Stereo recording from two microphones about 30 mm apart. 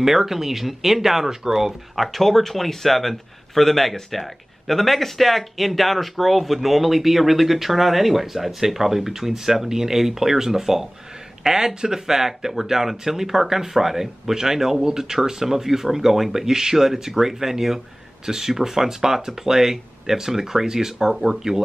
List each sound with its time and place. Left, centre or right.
0.0 s speech: centre
2.0 s a man's voice: centre